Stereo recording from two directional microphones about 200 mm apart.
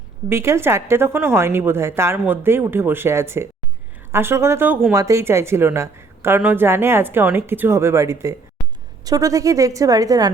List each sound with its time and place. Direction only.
0.3 s a woman's voice: 10° right (ahead or behind)